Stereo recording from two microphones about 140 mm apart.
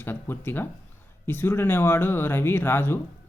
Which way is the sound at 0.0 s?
15° left (ahead or behind).